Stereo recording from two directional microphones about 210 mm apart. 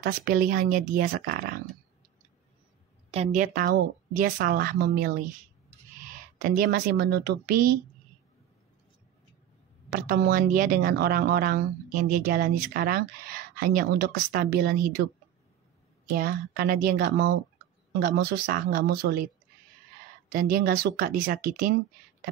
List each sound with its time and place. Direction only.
0.0 s speech: 45° right (ahead or behind)
3.1 s speech: 30° right (ahead or behind)
6.4 s speech: 45° right (ahead or behind)
9.8 s speech: 45° right (ahead or behind)
16.2 s speech: 45° right (ahead or behind)